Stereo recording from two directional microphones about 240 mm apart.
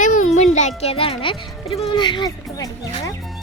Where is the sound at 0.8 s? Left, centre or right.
Left.